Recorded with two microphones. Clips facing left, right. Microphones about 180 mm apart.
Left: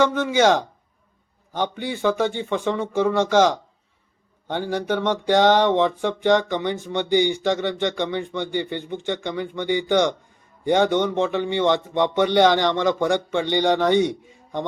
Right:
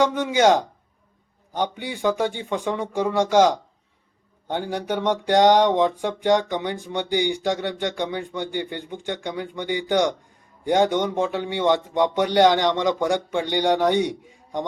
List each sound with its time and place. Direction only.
0.0 s speech: 15° right (ahead or behind)